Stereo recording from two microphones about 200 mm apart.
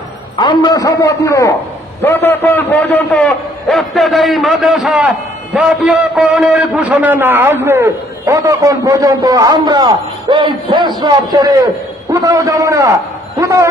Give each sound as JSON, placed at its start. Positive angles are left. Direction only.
{"t": 0.4, "sound": "a man's voice", "side_deg": 20}